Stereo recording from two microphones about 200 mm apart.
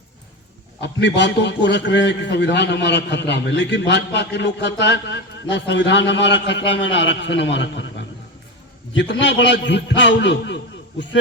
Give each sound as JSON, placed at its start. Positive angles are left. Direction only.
{"t": 0.8, "sound": "a man's voice", "side_deg": 60}